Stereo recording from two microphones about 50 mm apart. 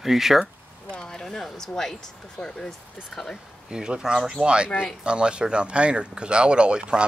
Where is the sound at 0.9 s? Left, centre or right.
Centre.